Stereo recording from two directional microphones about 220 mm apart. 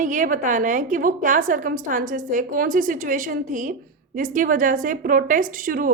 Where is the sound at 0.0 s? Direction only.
35° right (ahead or behind).